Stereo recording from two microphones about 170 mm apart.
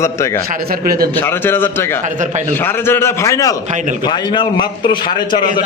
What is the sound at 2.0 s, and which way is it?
Speech, 45° right (ahead or behind).